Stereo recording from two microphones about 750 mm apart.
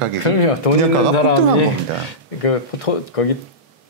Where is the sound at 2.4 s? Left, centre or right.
Left.